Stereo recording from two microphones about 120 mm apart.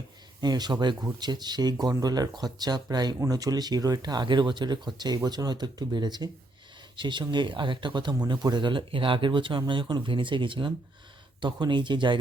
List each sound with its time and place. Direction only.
0.4 s speech: 35° right (ahead or behind)